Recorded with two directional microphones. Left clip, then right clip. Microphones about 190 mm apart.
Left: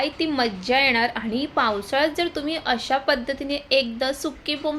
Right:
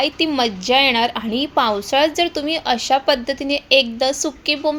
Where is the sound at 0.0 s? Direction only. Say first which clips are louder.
Right 5 dB; 30° right (ahead or behind).